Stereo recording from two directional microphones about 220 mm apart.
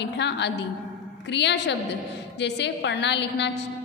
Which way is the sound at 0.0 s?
50° left (ahead or behind).